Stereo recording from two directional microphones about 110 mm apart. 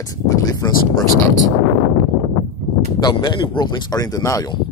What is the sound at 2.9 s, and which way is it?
Speech, 40° left (ahead or behind).